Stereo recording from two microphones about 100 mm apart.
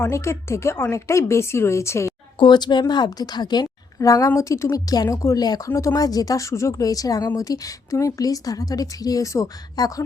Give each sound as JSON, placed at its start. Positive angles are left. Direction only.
{"t": 0.0, "sound": "a woman's voice", "side_deg": 30}
{"t": 2.4, "sound": "a woman's voice", "side_deg": 45}